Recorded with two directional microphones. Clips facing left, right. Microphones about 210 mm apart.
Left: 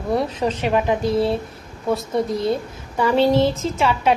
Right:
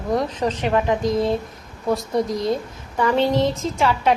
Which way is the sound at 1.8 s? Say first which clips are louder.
Even; centre (ahead or behind).